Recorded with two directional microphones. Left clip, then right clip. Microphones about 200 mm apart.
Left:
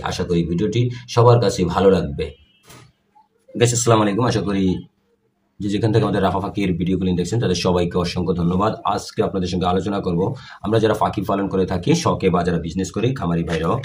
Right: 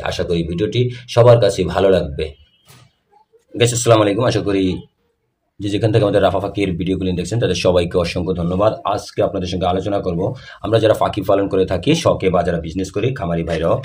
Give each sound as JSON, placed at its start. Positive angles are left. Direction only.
{"t": 0.0, "sound": "speech", "side_deg": -40}
{"t": 3.5, "sound": "speech", "side_deg": -45}